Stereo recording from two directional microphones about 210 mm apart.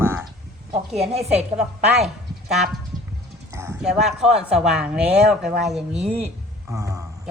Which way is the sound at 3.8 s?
Centre (ahead or behind).